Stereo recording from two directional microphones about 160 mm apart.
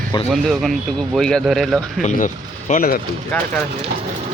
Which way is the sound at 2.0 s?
50° left (ahead or behind).